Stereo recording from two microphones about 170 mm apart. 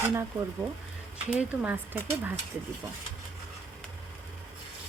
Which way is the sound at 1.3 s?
10° right (ahead or behind).